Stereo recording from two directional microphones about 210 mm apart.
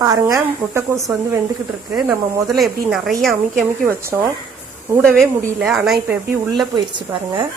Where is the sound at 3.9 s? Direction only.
10° right (ahead or behind).